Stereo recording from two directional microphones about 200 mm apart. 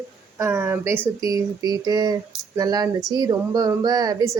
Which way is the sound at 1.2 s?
20° right (ahead or behind).